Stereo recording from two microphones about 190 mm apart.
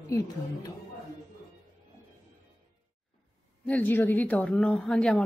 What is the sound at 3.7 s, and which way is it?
A woman's voice, 10° left (ahead or behind).